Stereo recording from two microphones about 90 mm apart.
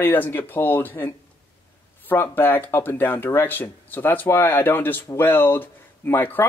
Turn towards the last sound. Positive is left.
turn(degrees=25)  # may be behind; listen again after turning